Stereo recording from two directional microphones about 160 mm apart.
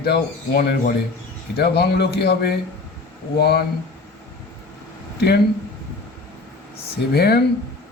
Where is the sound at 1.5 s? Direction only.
90° left.